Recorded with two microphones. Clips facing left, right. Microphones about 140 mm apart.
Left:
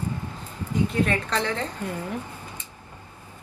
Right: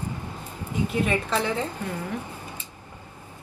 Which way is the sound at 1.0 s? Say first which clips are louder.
Even; 10° right (ahead or behind).